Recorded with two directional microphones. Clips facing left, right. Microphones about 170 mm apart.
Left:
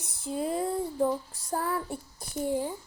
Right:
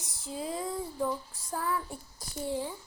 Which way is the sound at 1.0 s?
40° left (ahead or behind).